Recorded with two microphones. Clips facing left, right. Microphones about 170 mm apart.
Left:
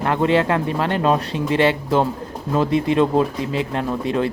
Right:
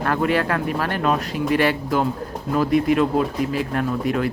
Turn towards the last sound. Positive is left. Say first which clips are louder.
# left 1 dB
turn(degrees=25)  # may be behind; listen again after turning